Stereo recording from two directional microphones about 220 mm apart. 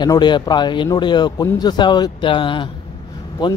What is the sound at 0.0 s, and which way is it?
A man's voice, 20° left (ahead or behind).